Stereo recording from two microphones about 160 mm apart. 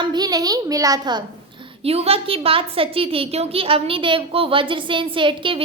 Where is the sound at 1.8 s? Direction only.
40° right (ahead or behind).